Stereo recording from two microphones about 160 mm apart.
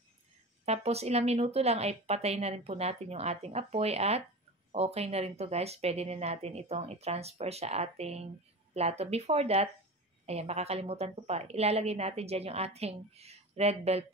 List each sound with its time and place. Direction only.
0.7 s a woman's voice: 40° right (ahead or behind)